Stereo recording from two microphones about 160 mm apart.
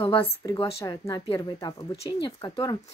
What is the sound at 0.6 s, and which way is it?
Speech, 35° left (ahead or behind).